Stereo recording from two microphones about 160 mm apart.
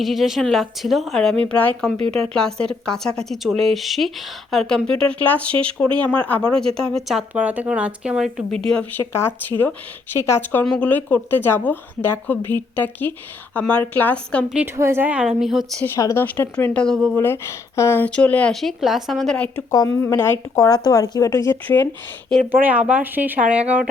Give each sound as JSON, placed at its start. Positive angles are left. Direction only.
{"t": 0.0, "sound": "speech", "side_deg": 0}
{"t": 14.5, "sound": "a woman's voice", "side_deg": -15}
{"t": 16.0, "sound": "speech", "side_deg": 15}
{"t": 17.2, "sound": "speech", "side_deg": 15}
{"t": 19.7, "sound": "speech", "side_deg": 20}
{"t": 22.6, "sound": "a woman's voice", "side_deg": -10}